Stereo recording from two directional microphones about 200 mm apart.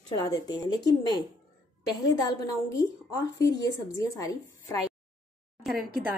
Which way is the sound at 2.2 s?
15° left (ahead or behind).